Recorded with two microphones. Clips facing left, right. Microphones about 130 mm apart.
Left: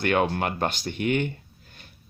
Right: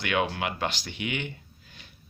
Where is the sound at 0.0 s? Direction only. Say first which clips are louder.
Left 4 dB; 45° left (ahead or behind).